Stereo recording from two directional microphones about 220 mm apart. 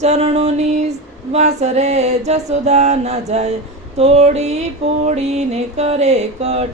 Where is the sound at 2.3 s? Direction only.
30° right (ahead or behind).